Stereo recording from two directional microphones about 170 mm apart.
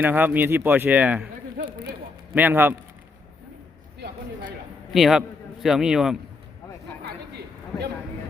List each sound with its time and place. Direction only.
0.0 s speech: 10° right (ahead or behind)
2.3 s speech: 10° right (ahead or behind)
4.9 s speech: centre (ahead or behind)
7.0 s a sound: 75° right (ahead or behind)